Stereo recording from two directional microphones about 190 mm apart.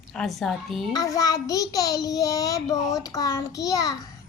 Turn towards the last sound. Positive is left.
turn(degrees=20)  # may be behind; listen again after turning